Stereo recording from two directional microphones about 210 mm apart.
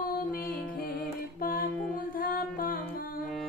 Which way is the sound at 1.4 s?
45° left (ahead or behind).